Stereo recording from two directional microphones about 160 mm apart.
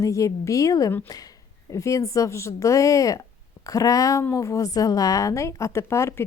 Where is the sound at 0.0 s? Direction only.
20° left (ahead or behind).